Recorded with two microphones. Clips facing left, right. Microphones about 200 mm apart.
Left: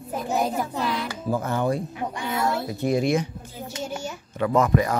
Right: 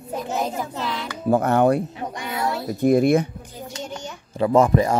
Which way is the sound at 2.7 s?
50° right (ahead or behind).